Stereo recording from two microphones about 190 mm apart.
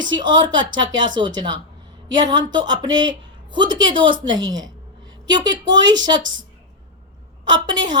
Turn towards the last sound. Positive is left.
turn(degrees=-25)  # may be behind; listen again after turning